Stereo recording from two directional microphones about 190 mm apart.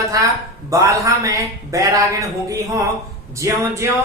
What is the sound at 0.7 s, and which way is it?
A man's voice, 15° right (ahead or behind).